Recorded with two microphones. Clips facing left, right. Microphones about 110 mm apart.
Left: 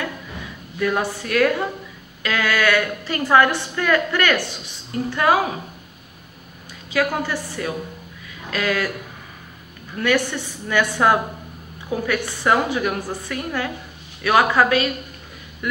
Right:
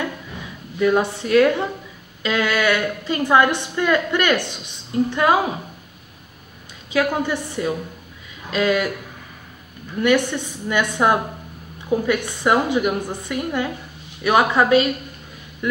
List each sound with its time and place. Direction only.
0.7 s a woman's voice: 20° right (ahead or behind)
6.9 s a woman's voice: 20° right (ahead or behind)
9.9 s a woman's voice: 20° right (ahead or behind)